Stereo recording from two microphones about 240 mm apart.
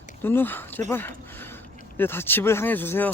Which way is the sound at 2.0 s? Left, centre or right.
Centre.